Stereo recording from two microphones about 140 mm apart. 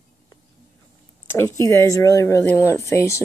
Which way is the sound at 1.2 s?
20° left (ahead or behind).